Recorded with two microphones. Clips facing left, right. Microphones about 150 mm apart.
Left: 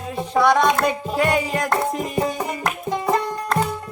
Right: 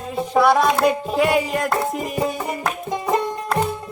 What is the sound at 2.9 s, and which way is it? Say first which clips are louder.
Music: even; 20° right (ahead or behind).